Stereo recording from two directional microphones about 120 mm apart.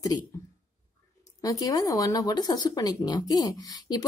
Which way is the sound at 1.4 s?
30° left (ahead or behind).